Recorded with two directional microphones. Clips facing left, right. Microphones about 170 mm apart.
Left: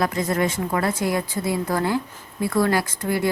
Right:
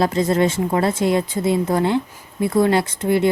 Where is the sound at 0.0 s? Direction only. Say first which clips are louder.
Right 5 dB; 25° right (ahead or behind).